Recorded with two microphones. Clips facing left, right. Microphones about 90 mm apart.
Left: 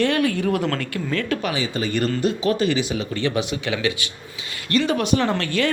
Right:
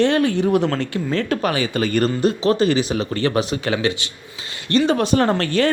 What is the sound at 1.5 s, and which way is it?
Speech, 55° right (ahead or behind).